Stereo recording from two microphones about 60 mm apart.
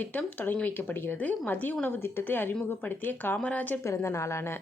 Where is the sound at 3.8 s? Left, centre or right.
Left.